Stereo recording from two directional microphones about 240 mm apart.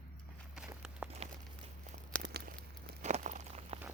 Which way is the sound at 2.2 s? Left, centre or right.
Right.